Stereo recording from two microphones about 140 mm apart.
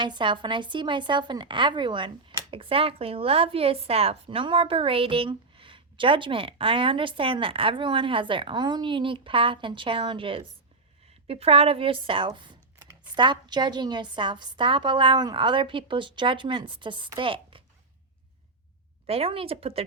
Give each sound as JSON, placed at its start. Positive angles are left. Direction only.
{"t": 0.0, "sound": "a woman's voice", "side_deg": -35}
{"t": 19.0, "sound": "speech", "side_deg": -45}